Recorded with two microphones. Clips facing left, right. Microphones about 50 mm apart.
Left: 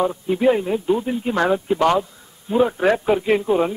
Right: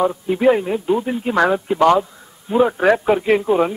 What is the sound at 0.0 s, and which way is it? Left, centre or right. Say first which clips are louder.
A man's voice: right 2 dB; centre.